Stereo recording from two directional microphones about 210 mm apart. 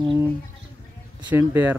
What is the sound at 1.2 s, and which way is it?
Speech, 10° right (ahead or behind).